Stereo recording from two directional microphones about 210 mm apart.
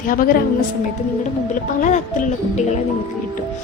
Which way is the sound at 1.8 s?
35° left (ahead or behind).